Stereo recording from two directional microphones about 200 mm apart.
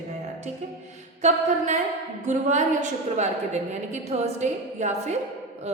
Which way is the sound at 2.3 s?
35° right (ahead or behind).